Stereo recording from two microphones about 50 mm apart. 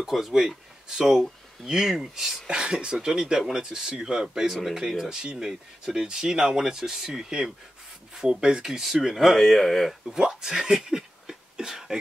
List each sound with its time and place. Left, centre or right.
0.0 s speech: centre
10.1 s speech: centre